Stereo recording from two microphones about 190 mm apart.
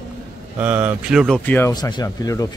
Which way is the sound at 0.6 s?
10° right (ahead or behind).